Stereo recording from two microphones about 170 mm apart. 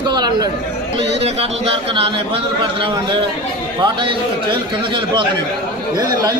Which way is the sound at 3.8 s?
30° right (ahead or behind).